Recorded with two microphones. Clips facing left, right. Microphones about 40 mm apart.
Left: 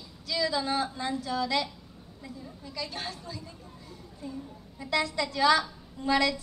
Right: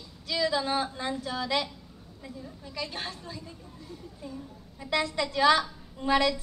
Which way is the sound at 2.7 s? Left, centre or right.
Centre.